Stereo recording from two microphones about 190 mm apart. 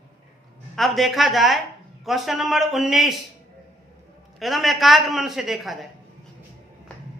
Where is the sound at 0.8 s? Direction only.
Centre (ahead or behind).